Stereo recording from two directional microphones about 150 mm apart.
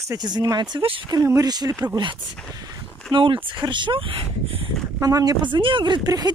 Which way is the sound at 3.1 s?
35° right (ahead or behind).